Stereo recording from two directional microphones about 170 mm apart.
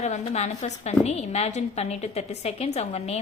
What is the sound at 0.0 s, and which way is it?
A woman's voice, 40° left (ahead or behind).